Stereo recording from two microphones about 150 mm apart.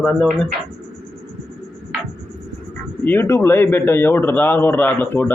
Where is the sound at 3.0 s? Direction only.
15° left (ahead or behind).